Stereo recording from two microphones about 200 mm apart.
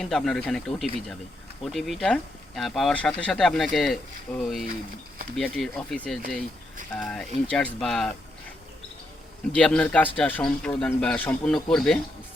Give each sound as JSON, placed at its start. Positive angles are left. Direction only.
{"t": 0.0, "sound": "speech", "side_deg": 0}
{"t": 9.6, "sound": "speech", "side_deg": 5}